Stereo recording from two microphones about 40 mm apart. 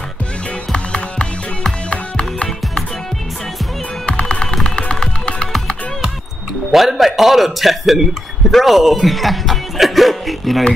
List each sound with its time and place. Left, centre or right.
0.7 s music: left
4.0 s music: left
5.0 s music: centre
6.7 s speech: centre